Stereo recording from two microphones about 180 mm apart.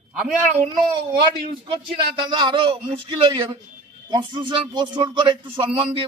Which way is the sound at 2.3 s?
25° right (ahead or behind).